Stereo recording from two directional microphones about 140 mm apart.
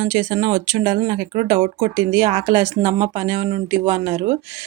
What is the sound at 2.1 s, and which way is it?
Speech, 40° right (ahead or behind).